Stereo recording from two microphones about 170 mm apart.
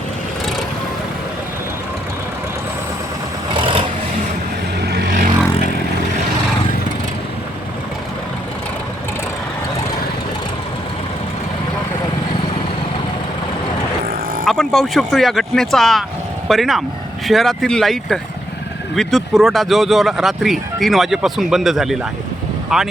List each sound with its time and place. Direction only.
3.5 s vehicle: 30° right (ahead or behind)
4.9 s vehicle: 60° right (ahead or behind)
14.0 s vehicle: 55° right (ahead or behind)
14.4 s speech: centre (ahead or behind)